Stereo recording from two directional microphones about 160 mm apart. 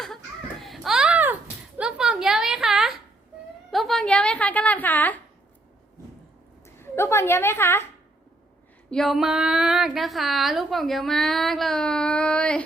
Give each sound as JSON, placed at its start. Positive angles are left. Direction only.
{"t": 0.6, "sound": "a sound", "side_deg": 0}
{"t": 6.7, "sound": "a woman's voice", "side_deg": 15}
{"t": 8.9, "sound": "speech", "side_deg": 0}